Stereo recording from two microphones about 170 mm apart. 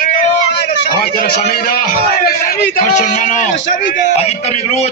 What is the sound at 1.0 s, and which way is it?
A man's voice, 70° left (ahead or behind).